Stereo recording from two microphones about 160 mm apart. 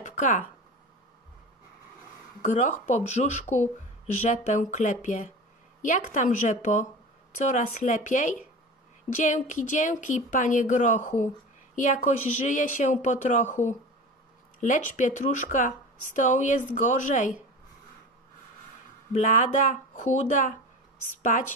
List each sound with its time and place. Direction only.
0.0 s a sound: 50° left (ahead or behind)
2.4 s speech: 50° left (ahead or behind)
14.6 s speech: 50° left (ahead or behind)
19.1 s speech: 55° left (ahead or behind)